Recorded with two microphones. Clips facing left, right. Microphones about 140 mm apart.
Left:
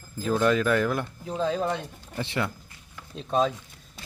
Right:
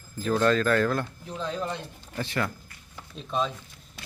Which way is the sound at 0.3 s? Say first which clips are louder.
Even; 10° left (ahead or behind).